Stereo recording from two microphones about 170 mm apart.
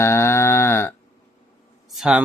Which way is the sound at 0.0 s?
15° left (ahead or behind).